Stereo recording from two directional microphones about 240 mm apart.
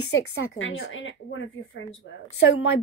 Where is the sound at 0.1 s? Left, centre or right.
Left.